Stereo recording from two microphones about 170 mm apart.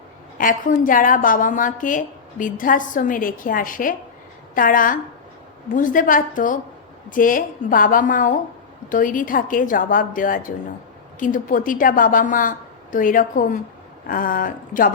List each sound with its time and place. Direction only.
0.3 s a woman's voice: 50° left (ahead or behind)